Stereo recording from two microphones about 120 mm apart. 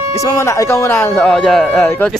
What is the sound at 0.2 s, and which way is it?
Speech, 25° left (ahead or behind).